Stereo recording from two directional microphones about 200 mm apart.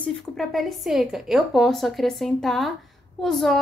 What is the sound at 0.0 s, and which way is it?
A woman's voice, centre (ahead or behind).